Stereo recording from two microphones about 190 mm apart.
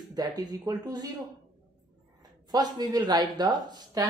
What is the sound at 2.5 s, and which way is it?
Speech, 20° right (ahead or behind).